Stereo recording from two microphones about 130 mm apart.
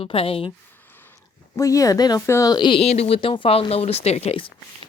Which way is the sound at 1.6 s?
25° left (ahead or behind).